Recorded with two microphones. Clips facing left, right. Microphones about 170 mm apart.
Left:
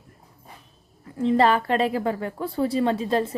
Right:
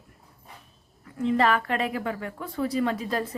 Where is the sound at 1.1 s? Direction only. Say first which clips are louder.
Left 4 dB; 30° left (ahead or behind).